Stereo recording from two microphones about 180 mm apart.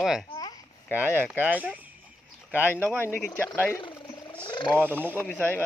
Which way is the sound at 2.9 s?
10° left (ahead or behind).